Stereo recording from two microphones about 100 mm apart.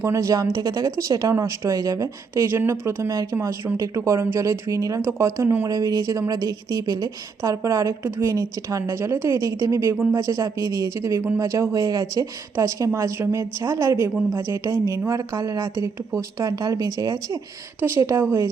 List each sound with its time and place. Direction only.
0.0 s a woman's voice: 30° right (ahead or behind)
3.3 s speech: 20° right (ahead or behind)
3.8 s speech: 30° right (ahead or behind)
5.6 s a woman's voice: 35° right (ahead or behind)
9.9 s speech: 20° right (ahead or behind)
10.2 s a woman's voice: 30° right (ahead or behind)
17.7 s speech: 20° right (ahead or behind)